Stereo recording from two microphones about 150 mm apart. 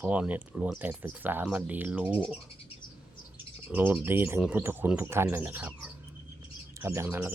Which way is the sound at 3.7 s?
15° right (ahead or behind).